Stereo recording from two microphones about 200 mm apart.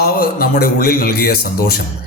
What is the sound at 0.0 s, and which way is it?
Speech, 50° left (ahead or behind).